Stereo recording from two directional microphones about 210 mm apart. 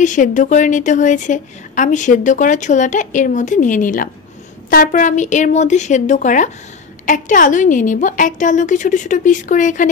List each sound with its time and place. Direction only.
0.0 s a woman's voice: 35° left (ahead or behind)